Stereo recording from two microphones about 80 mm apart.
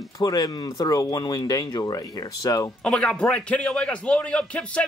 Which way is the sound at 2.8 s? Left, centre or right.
Centre.